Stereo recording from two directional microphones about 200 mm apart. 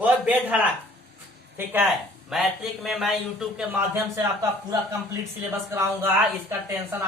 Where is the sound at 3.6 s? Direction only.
10° right (ahead or behind).